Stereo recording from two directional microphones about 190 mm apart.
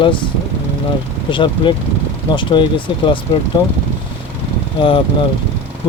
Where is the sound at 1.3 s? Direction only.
25° left (ahead or behind).